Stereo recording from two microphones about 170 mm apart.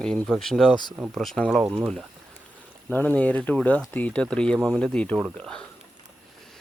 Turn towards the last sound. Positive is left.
turn(degrees=5)  # may be behind; listen again after turning